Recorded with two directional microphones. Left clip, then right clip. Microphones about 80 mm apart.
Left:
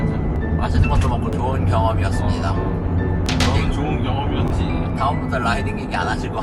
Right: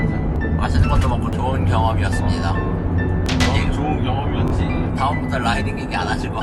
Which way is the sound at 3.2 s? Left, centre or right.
Centre.